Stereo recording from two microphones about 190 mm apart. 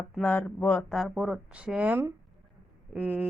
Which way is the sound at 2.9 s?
10° right (ahead or behind).